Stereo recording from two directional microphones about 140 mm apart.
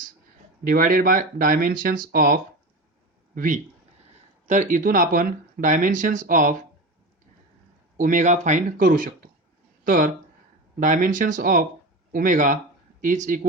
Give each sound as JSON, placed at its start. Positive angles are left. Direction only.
{"t": 0.6, "sound": "speech", "side_deg": -90}
{"t": 3.3, "sound": "speech", "side_deg": -70}
{"t": 7.9, "sound": "speech", "side_deg": -70}